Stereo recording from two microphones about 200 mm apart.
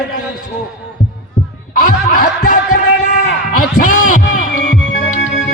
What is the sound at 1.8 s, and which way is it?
Snicker, 45° left (ahead or behind).